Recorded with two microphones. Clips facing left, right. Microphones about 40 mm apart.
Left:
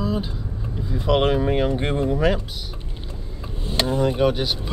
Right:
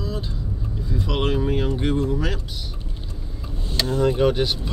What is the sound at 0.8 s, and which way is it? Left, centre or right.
Speech, left.